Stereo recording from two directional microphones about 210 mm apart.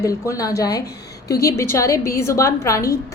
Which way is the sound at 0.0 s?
15° left (ahead or behind).